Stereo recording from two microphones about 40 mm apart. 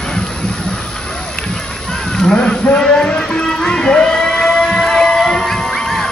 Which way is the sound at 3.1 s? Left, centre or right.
Left.